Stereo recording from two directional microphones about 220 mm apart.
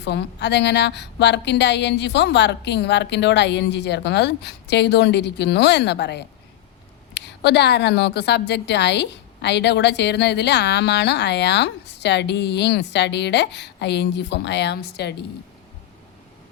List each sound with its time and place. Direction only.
0.0 s a woman's voice: 50° left (ahead or behind)